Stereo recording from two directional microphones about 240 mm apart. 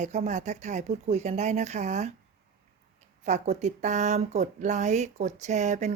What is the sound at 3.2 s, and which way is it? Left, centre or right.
Speech, right.